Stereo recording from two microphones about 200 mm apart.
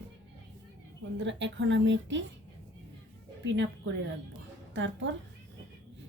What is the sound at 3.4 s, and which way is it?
Speech, 65° right (ahead or behind).